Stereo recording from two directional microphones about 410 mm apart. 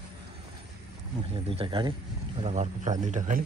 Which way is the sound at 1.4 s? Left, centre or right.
Centre.